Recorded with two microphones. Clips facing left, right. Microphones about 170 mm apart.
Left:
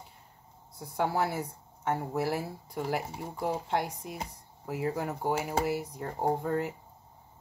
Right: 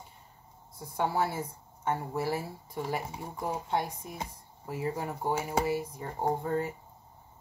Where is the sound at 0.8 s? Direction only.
70° left (ahead or behind).